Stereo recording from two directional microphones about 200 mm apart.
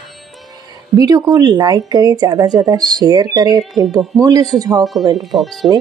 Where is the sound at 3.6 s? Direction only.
Centre (ahead or behind).